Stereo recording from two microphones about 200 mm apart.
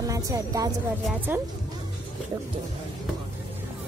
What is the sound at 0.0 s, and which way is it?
A woman's voice, 15° right (ahead or behind).